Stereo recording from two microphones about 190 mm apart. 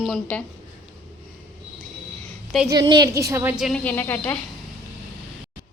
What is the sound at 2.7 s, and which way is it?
A woman's voice, 20° right (ahead or behind).